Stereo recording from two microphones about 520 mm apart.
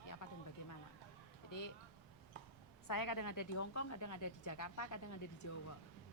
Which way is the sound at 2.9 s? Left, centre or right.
Left.